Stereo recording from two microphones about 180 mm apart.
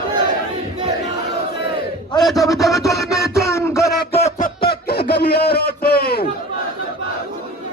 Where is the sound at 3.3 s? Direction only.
15° left (ahead or behind).